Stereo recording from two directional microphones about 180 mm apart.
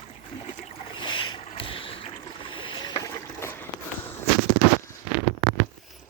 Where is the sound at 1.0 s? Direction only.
25° left (ahead or behind).